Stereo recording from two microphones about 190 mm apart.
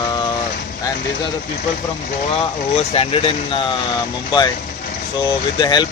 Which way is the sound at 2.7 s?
30° left (ahead or behind).